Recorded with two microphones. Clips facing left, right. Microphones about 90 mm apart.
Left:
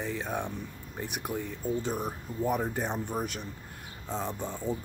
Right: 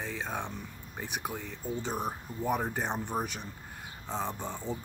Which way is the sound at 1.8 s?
20° right (ahead or behind).